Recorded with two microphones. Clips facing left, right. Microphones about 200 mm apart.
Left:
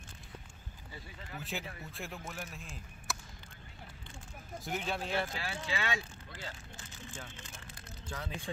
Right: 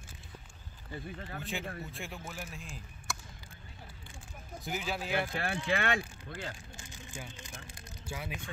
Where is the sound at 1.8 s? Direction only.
Centre (ahead or behind).